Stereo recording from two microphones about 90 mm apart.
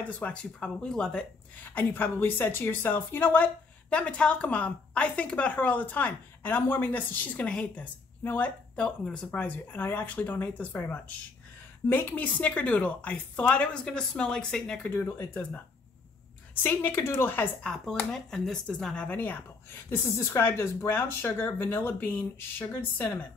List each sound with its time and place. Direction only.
0.0 s a woman's voice: 15° left (ahead or behind)
1.6 s a woman's voice: 20° left (ahead or behind)
15.0 s a woman's voice: 25° left (ahead or behind)
16.6 s a woman's voice: 25° left (ahead or behind)
18.1 s speech: 5° left (ahead or behind)
19.0 s a woman's voice: 20° left (ahead or behind)